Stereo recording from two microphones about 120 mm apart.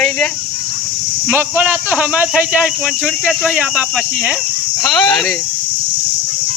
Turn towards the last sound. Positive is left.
turn(degrees=0)  # may be behind; listen again after turning